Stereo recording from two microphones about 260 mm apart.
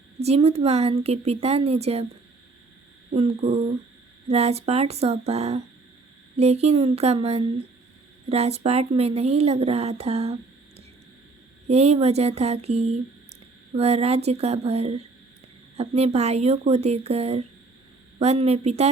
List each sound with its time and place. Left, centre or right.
0.2 s a woman's voice: right
3.1 s a woman's voice: right
11.7 s a woman's voice: right